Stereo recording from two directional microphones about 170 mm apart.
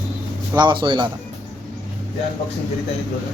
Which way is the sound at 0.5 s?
25° right (ahead or behind).